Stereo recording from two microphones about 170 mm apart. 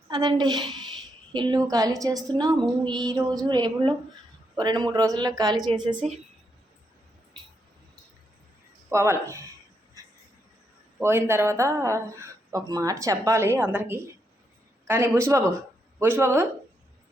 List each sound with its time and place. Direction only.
0.1 s a woman's voice: 25° right (ahead or behind)
8.9 s speech: 15° right (ahead or behind)
11.0 s speech: 15° right (ahead or behind)